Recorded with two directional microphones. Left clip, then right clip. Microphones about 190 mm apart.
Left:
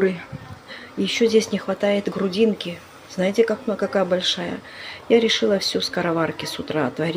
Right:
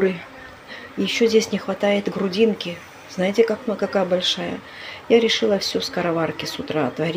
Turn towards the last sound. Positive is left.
turn(degrees=5)  # may be behind; listen again after turning